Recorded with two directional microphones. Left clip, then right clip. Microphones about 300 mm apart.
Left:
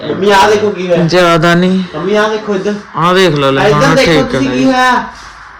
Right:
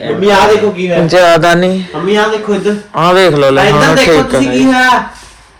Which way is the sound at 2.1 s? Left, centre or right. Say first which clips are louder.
Right 1 dB; right.